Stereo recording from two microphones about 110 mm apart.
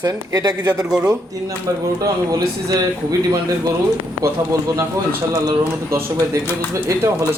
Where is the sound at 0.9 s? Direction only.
10° right (ahead or behind).